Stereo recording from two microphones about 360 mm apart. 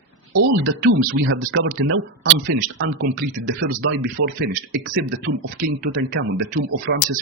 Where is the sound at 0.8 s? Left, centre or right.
Right.